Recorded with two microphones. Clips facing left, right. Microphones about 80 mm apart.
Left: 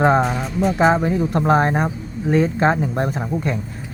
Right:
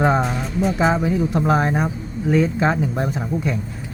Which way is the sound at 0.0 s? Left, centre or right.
Centre.